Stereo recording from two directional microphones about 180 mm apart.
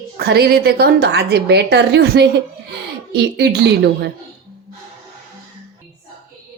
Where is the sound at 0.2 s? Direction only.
60° right (ahead or behind).